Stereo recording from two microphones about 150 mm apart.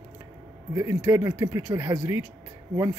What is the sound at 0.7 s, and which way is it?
Speech, 20° right (ahead or behind).